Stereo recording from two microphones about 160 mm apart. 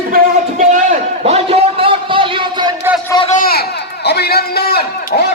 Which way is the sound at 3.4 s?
70° left (ahead or behind).